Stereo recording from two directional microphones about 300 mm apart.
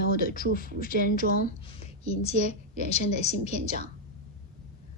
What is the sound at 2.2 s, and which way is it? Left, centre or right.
A woman's voice, left.